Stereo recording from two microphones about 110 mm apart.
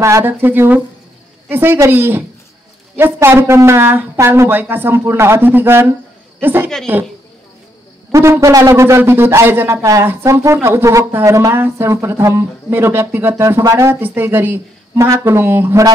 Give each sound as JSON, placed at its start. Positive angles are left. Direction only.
{"t": 0.0, "sound": "speech", "side_deg": -25}
{"t": 8.1, "sound": "speech", "side_deg": -25}